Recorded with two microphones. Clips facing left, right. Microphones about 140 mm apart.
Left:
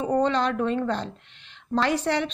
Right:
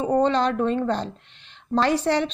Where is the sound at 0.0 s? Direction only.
30° right (ahead or behind).